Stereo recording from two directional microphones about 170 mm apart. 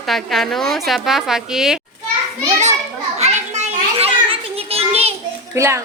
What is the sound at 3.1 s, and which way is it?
Children playing, 40° right (ahead or behind).